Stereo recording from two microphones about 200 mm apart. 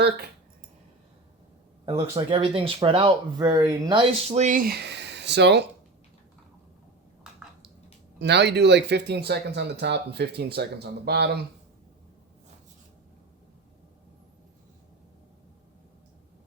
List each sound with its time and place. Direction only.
2.0 s speech: 25° right (ahead or behind); by 5.6 s 55° right (ahead or behind)
8.2 s speech: 60° right (ahead or behind)